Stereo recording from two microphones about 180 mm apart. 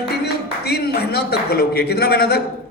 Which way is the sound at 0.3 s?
60° left (ahead or behind).